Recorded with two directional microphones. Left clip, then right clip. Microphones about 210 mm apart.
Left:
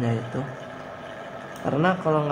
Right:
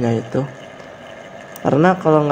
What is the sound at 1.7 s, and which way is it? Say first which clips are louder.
Speech: right 9 dB; 35° right (ahead or behind).